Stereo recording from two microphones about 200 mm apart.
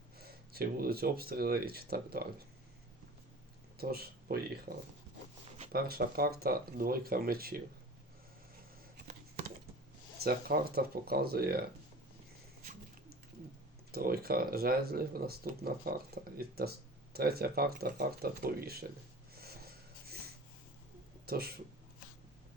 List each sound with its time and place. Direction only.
0.2 s speech: 50° right (ahead or behind)
3.8 s speech: 50° right (ahead or behind)
4.7 s speech: 35° right (ahead or behind)
5.7 s speech: 50° right (ahead or behind)
10.2 s speech: 50° right (ahead or behind)
13.9 s speech: 50° right (ahead or behind)
19.4 s a sound: 50° right (ahead or behind)
21.2 s speech: 50° right (ahead or behind)